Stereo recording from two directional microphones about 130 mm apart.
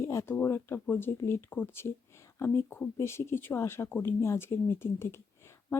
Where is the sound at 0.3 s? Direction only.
15° left (ahead or behind).